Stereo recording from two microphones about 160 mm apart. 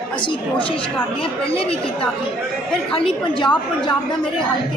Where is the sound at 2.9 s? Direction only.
35° left (ahead or behind).